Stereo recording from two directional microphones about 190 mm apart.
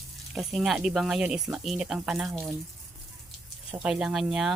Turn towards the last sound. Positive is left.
turn(degrees=0)  # may be behind; listen again after turning